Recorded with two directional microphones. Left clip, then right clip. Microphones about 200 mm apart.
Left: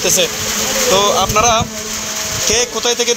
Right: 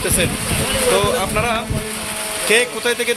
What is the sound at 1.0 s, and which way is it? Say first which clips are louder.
Speech: left 6 dB; 20° left (ahead or behind).